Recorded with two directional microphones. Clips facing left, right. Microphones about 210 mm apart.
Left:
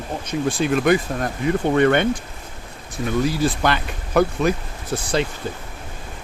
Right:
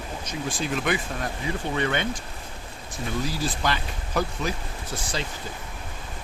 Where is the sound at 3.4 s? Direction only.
60° left (ahead or behind).